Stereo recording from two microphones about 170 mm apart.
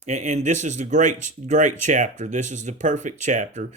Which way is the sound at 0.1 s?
45° right (ahead or behind).